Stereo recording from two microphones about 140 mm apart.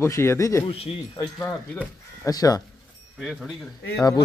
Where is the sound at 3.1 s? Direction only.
Centre (ahead or behind).